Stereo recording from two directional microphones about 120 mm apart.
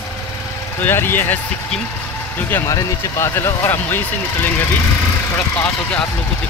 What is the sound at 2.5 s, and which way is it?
Speech, 25° left (ahead or behind).